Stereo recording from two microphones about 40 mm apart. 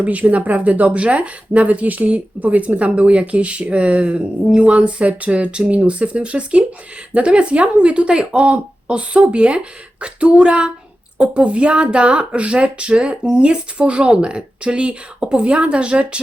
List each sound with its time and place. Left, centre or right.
0.0 s speech: right